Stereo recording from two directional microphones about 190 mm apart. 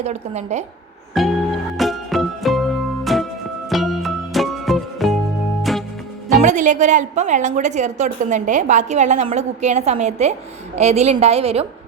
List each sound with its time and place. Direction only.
0.0 s a woman's voice: 35° right (ahead or behind)
1.2 s music: centre (ahead or behind)
6.4 s a woman's voice: 40° right (ahead or behind)